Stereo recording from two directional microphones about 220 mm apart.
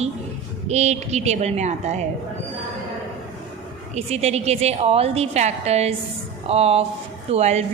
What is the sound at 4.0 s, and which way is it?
A woman's voice, 30° right (ahead or behind).